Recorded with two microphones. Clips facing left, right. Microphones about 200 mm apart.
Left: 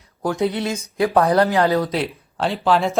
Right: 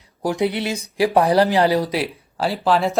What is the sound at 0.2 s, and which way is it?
Speech, 15° right (ahead or behind).